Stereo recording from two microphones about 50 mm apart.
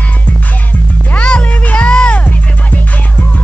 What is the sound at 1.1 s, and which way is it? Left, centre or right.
Music, left.